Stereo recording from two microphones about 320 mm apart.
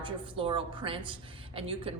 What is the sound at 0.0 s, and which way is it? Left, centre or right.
A woman's voice, centre.